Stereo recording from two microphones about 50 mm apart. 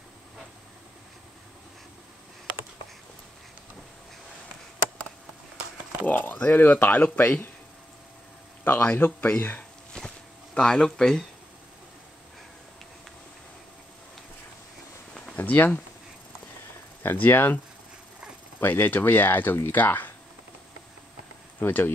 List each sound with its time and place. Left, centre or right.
6.0 s a sound: left
6.5 s speech: left
8.6 s speech: left
9.9 s a sound: centre
15.3 s speech: left
17.0 s speech: left
18.6 s speech: left
21.5 s speech: left